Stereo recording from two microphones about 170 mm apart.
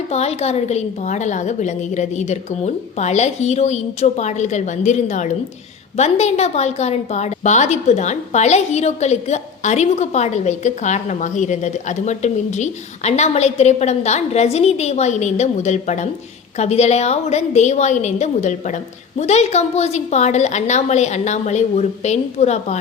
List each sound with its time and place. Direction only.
0.1 s a woman's voice: 40° left (ahead or behind)